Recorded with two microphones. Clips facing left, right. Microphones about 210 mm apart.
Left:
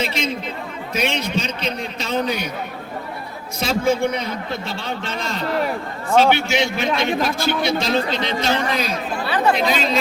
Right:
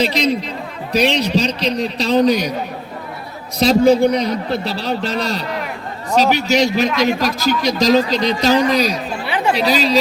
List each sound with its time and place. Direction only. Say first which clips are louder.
0.0 s a man's voice: right 7 dB; 35° right (ahead or behind)
3.6 s a man's voice: right 8 dB; 35° right (ahead or behind)
9.2 s chatter: left 2 dB; 15° right (ahead or behind)
9.6 s a man's voice: right 4 dB; 35° right (ahead or behind)